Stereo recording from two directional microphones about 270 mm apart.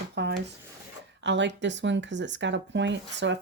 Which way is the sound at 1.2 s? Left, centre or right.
Right.